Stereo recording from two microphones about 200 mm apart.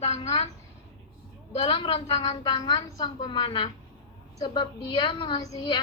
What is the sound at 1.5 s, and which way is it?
A woman's voice, 25° left (ahead or behind).